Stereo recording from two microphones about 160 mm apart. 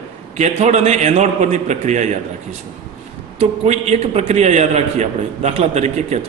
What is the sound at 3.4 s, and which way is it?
A man's voice, 40° right (ahead or behind).